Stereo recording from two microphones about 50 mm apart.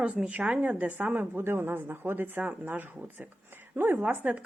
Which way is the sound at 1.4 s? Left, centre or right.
Right.